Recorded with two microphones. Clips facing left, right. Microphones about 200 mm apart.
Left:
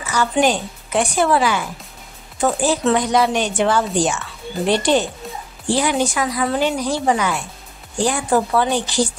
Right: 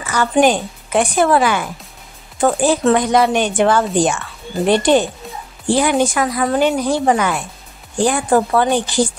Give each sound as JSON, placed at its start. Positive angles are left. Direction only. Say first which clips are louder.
{"t": 0.0, "sound": "a woman's voice", "louder": "right 3 dB", "side_deg": -55}